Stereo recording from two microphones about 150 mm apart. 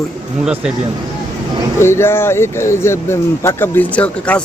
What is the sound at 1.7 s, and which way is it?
Speech, 15° left (ahead or behind).